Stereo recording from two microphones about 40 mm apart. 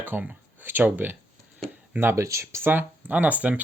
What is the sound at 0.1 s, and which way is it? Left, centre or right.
Speech, right.